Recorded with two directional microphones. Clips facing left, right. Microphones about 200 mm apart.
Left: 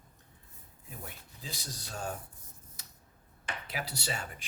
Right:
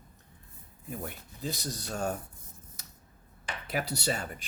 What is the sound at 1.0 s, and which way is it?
Speech, 50° right (ahead or behind).